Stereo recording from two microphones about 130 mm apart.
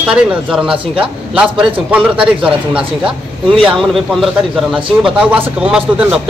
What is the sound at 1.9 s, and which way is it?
A man's voice, 10° right (ahead or behind).